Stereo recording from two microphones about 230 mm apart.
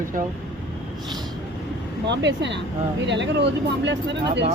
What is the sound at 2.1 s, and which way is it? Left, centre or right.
Speech, right.